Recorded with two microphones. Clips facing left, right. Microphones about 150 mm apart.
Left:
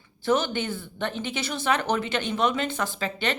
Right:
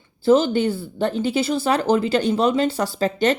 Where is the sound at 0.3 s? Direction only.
30° right (ahead or behind).